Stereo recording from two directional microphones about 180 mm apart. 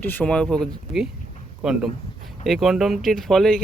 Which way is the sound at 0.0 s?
10° left (ahead or behind).